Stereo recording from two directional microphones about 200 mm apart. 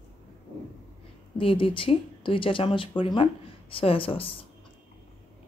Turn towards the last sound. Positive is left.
turn(degrees=25)  # may be behind; listen again after turning